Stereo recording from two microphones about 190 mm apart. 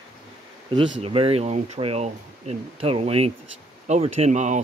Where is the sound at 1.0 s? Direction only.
30° right (ahead or behind).